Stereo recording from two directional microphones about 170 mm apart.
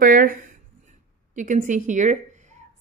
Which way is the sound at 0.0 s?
55° right (ahead or behind).